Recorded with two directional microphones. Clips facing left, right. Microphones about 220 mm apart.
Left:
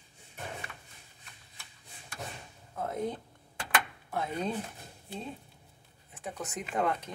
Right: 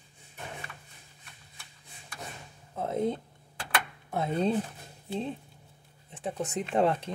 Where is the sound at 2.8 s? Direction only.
25° right (ahead or behind).